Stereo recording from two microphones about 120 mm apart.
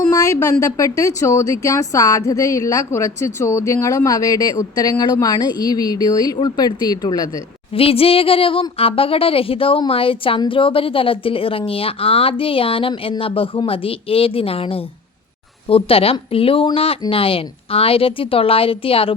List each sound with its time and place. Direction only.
0.1 s a sound: 25° left (ahead or behind)
0.6 s speech: 25° left (ahead or behind)
7.8 s speech: 55° left (ahead or behind)